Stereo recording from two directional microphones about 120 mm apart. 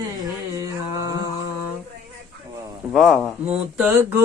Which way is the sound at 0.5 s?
25° right (ahead or behind).